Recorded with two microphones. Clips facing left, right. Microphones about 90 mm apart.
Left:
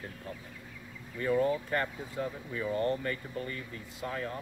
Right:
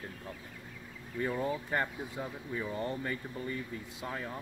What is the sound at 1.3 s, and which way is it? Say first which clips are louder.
Speech: left 7 dB; 10° right (ahead or behind).